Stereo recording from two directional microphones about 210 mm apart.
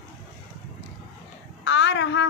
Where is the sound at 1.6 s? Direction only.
60° left (ahead or behind).